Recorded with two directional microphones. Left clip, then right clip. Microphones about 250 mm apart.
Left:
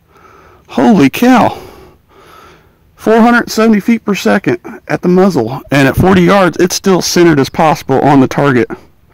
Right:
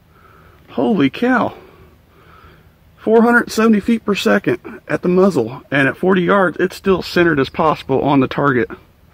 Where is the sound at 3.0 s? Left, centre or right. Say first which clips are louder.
Left 4 dB; left.